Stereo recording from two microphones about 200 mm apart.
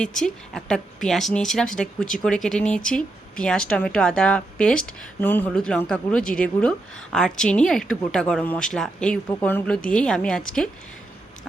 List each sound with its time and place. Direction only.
0.0 s speech: centre (ahead or behind)